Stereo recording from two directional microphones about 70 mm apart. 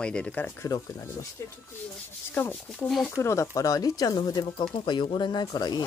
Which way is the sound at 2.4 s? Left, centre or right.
Left.